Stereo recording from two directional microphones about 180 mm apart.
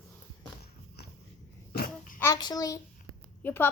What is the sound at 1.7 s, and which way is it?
Babbling, 55° left (ahead or behind).